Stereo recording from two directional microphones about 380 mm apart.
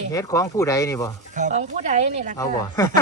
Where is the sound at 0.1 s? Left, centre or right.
Centre.